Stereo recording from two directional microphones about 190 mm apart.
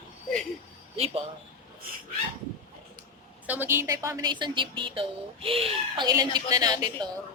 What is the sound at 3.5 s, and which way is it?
A woman's voice, 10° right (ahead or behind).